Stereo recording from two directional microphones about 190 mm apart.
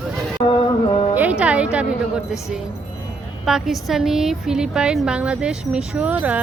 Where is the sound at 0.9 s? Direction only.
25° left (ahead or behind).